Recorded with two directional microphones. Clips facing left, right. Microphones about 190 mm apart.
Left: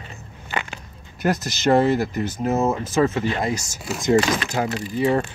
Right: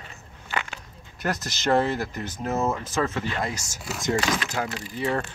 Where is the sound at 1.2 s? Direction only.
10° left (ahead or behind).